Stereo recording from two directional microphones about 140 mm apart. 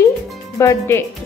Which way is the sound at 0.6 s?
20° left (ahead or behind).